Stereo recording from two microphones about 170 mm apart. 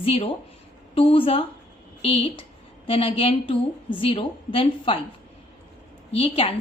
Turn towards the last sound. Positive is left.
turn(degrees=35)  # may be behind; listen again after turning